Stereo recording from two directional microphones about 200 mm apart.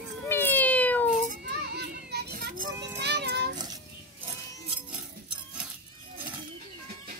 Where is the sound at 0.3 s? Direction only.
10° left (ahead or behind).